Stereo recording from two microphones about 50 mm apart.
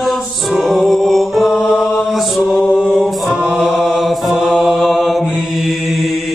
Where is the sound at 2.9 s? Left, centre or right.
Centre.